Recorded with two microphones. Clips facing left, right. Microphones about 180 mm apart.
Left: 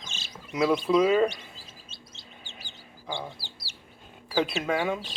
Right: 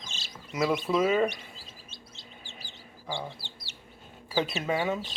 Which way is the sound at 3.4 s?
35° left (ahead or behind).